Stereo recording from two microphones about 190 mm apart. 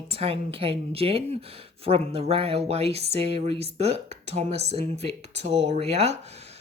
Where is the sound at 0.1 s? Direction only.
30° right (ahead or behind).